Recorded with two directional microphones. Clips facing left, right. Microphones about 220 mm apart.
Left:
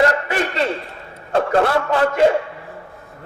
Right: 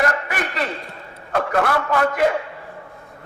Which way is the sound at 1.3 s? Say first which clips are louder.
Left 4 dB; 30° left (ahead or behind).